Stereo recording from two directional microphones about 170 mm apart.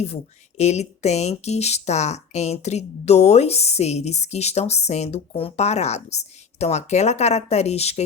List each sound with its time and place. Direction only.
0.0 s speech: 40° left (ahead or behind)